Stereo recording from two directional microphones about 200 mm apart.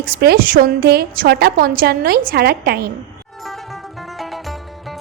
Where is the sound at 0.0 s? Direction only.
50° right (ahead or behind).